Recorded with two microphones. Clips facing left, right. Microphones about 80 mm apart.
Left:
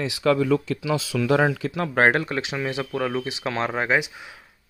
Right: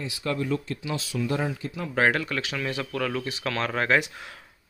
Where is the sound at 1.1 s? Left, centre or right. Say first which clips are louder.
Left 8 dB; left.